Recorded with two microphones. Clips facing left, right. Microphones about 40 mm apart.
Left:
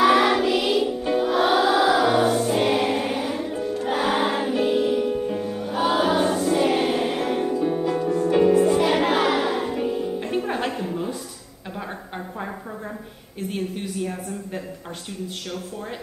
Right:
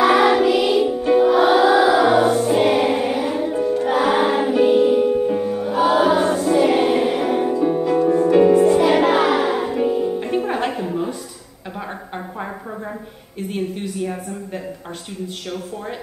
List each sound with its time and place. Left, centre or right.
0.0 s music: centre
7.6 s music: centre
13.4 s a sound: centre